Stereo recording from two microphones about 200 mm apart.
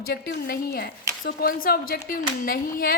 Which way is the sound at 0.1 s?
55° left (ahead or behind).